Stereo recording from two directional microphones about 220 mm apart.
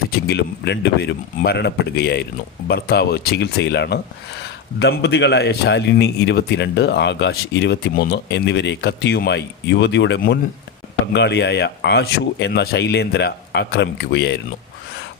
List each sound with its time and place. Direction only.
0.1 s speech: 50° left (ahead or behind)